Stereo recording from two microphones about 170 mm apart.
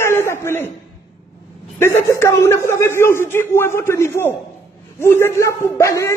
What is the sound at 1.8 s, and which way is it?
A man's voice, 15° left (ahead or behind).